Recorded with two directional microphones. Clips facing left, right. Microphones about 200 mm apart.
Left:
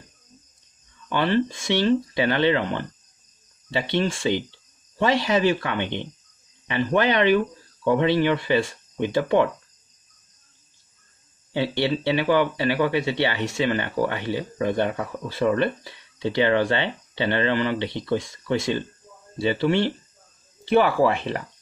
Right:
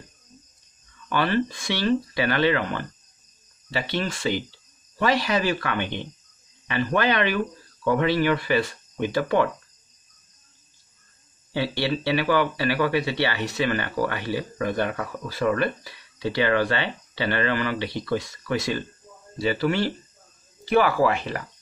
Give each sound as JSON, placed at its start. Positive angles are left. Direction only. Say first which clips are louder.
{"t": 1.0, "sound": "speech", "louder": "left 2 dB", "side_deg": 20}
{"t": 11.5, "sound": "speech", "louder": "left 2 dB", "side_deg": 20}